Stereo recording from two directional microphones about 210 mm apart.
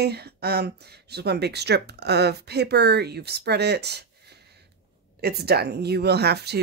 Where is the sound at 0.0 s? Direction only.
50° right (ahead or behind).